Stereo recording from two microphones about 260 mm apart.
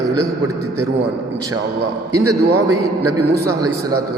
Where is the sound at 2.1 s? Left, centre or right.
Right.